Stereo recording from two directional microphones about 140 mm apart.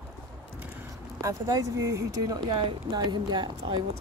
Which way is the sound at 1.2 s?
20° right (ahead or behind).